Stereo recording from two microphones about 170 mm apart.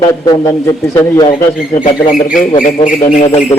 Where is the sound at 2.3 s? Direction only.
50° left (ahead or behind).